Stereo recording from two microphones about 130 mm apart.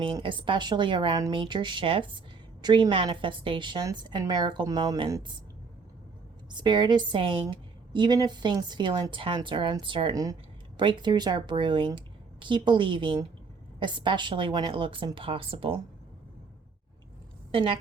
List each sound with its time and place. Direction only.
0.0 s a woman's voice: 40° right (ahead or behind)
6.5 s a woman's voice: 35° right (ahead or behind)
17.5 s a woman's voice: 45° right (ahead or behind)